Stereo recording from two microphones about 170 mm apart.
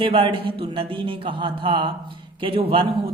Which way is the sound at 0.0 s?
30° right (ahead or behind).